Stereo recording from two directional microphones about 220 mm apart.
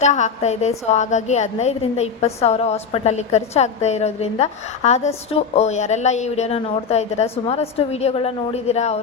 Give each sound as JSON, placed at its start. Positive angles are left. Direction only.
{"t": 0.0, "sound": "a woman's voice", "side_deg": 30}